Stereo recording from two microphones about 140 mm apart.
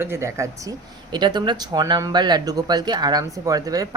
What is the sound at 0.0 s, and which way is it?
Speech, 20° right (ahead or behind).